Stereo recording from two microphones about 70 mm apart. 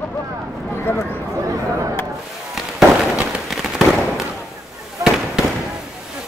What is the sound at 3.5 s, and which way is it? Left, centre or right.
Fireworks, centre.